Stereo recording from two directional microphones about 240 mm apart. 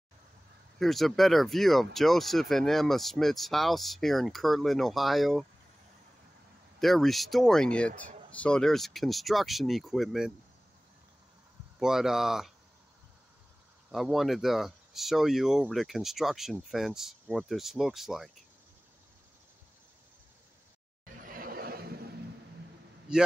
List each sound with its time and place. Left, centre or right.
0.7 s speech: centre
6.8 s speech: centre
11.8 s speech: centre
13.9 s speech: centre
21.0 s a sound: right
23.1 s speech: centre